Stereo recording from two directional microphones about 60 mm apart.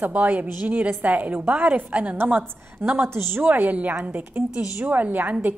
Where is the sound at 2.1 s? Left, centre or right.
Right.